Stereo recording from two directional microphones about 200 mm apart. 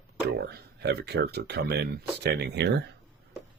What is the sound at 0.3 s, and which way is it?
Speech, 55° right (ahead or behind).